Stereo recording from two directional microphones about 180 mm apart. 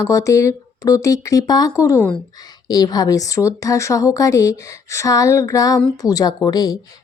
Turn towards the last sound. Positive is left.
turn(degrees=20)  # may be behind; listen again after turning